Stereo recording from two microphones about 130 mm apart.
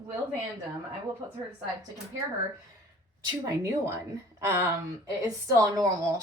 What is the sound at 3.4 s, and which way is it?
Speech, 25° right (ahead or behind).